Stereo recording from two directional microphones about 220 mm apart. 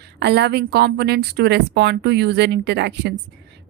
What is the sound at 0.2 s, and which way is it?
A woman's voice, 50° right (ahead or behind).